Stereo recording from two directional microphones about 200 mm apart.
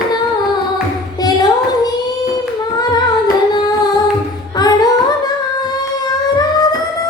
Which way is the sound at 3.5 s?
20° left (ahead or behind).